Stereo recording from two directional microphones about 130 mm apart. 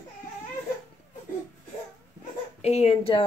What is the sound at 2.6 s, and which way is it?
Speech, 55° left (ahead or behind).